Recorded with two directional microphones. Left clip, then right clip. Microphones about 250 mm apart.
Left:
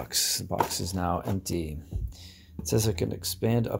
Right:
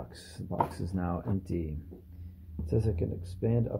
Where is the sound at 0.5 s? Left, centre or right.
Centre.